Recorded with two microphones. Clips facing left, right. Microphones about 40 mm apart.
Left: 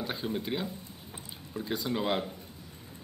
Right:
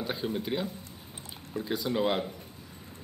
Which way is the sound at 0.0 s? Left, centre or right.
Centre.